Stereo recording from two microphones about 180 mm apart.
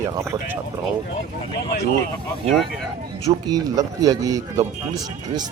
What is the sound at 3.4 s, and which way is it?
A man's voice, 20° right (ahead or behind).